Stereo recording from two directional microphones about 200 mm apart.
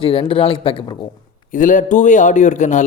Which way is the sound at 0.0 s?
25° left (ahead or behind).